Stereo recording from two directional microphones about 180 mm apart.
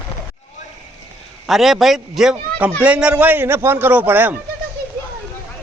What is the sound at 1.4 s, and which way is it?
A man's voice, centre (ahead or behind).